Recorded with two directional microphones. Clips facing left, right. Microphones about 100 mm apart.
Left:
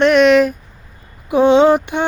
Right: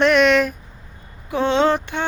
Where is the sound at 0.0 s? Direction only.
Centre (ahead or behind).